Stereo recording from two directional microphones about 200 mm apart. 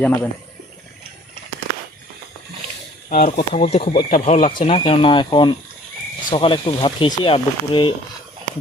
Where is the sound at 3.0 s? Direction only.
40° left (ahead or behind).